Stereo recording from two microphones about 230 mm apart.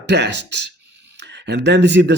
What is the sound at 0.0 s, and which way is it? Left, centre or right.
A man's voice, right.